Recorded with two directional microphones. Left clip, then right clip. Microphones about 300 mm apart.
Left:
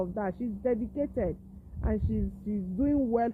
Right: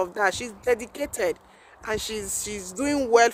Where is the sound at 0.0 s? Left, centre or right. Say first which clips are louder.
Right 9 dB; centre.